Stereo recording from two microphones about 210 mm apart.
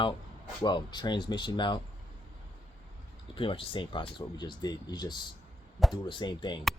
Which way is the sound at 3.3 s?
25° left (ahead or behind).